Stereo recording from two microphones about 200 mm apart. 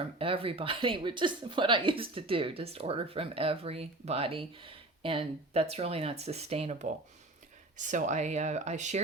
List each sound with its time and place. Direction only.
0.2 s speech: 25° right (ahead or behind)